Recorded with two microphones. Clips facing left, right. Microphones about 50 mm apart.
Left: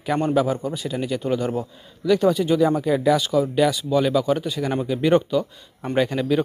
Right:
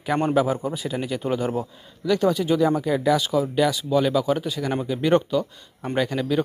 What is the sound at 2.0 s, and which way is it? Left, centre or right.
Speech, centre.